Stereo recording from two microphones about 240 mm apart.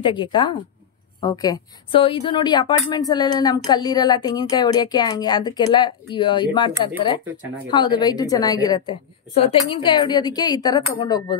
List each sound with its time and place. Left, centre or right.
0.0 s a woman's voice: centre